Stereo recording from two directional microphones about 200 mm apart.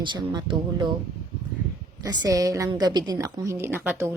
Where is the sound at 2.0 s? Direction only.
20° right (ahead or behind).